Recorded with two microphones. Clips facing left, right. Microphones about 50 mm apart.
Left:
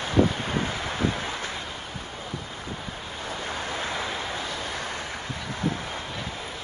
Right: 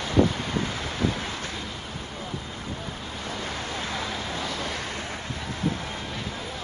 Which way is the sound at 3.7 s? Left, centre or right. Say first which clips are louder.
Left 1 dB; centre.